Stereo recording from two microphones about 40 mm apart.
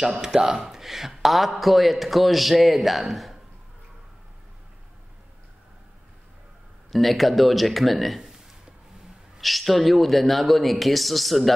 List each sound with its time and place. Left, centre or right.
0.0 s a man's voice: centre
6.9 s a man's voice: centre
9.4 s a man's voice: centre